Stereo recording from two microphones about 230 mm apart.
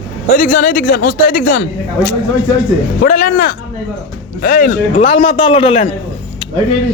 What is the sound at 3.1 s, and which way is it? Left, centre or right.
Speech, left.